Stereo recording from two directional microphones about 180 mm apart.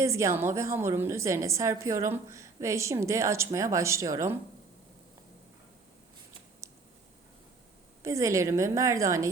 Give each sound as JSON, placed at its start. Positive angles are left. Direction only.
{"t": 0.0, "sound": "a woman's voice", "side_deg": -15}
{"t": 8.0, "sound": "a woman's voice", "side_deg": -15}